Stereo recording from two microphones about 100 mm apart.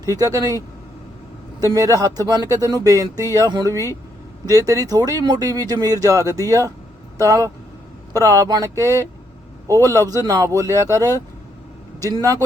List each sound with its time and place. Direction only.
0.2 s speech: 35° right (ahead or behind)
1.6 s speech: 35° right (ahead or behind)